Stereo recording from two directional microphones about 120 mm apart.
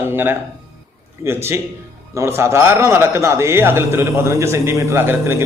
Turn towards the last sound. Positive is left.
turn(degrees=-20)  # may be behind; listen again after turning